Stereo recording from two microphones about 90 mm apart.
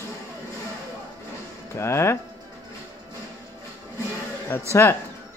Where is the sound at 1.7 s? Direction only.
30° left (ahead or behind).